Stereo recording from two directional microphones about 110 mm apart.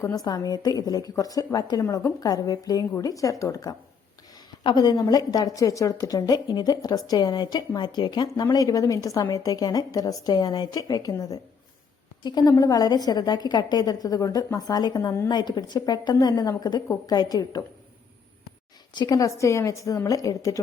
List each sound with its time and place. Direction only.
0.0 s a woman's voice: 35° left (ahead or behind)
18.9 s a woman's voice: 35° left (ahead or behind)